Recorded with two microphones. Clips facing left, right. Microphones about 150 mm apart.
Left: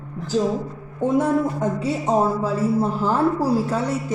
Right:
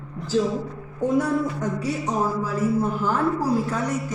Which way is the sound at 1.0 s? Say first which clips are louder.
Left 2 dB; 25° left (ahead or behind).